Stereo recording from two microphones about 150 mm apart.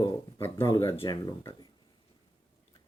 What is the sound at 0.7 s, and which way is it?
Speech, 30° left (ahead or behind).